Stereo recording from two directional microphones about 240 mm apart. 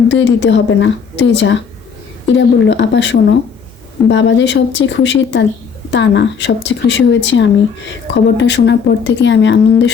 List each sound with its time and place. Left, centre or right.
0.1 s speech: left